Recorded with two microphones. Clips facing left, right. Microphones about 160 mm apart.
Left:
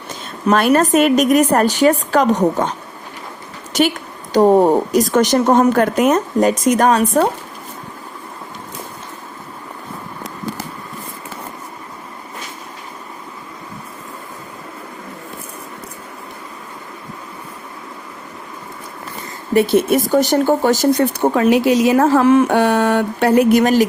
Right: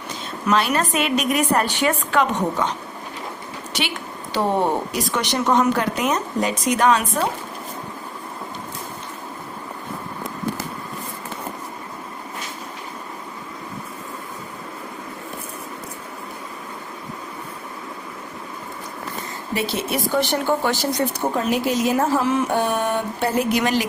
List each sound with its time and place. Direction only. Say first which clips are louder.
0.5 s speech: left 8 dB; 50° left (ahead or behind)
3.7 s speech: left 12 dB; 45° left (ahead or behind)
19.5 s speech: left 11 dB; 50° left (ahead or behind)
21.0 s speech: left 7 dB; 75° left (ahead or behind); by 23.8 s 45° left (ahead or behind)